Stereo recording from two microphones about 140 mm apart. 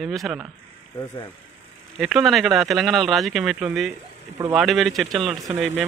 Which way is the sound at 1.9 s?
Centre (ahead or behind).